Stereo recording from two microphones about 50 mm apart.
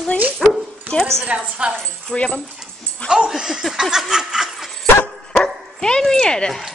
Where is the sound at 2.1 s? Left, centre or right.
Centre.